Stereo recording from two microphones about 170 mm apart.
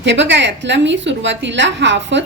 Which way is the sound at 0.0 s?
90° right.